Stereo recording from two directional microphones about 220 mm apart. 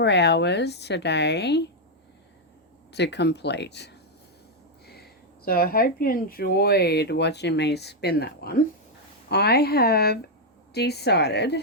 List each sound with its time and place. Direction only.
0.0 s speech: 50° left (ahead or behind)
2.9 s speech: 50° left (ahead or behind)